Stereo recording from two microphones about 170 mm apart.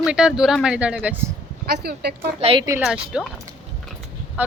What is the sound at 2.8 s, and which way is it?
Speech, centre (ahead or behind).